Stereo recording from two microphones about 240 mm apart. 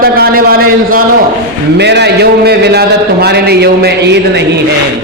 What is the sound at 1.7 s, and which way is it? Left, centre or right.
A man's voice, right.